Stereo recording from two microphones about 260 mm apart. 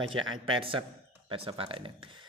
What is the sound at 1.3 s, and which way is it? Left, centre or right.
Speech, right.